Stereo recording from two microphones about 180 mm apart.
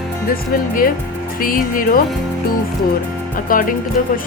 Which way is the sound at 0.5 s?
50° left (ahead or behind).